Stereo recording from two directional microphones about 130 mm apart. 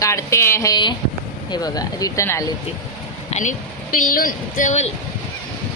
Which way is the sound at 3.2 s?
65° left (ahead or behind).